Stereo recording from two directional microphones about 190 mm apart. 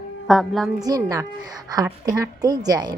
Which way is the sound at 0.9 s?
20° right (ahead or behind).